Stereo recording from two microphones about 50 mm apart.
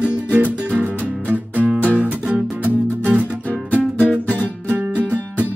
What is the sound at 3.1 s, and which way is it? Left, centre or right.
Music, right.